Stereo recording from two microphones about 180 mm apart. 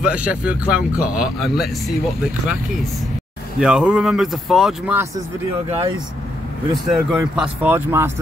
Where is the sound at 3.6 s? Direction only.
5° right (ahead or behind).